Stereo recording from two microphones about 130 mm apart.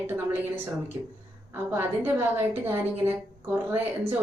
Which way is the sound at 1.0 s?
35° right (ahead or behind).